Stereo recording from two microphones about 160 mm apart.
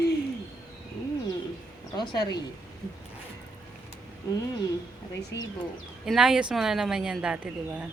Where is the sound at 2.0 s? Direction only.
25° left (ahead or behind).